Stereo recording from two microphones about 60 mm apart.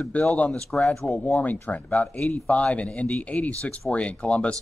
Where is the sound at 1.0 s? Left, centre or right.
Left.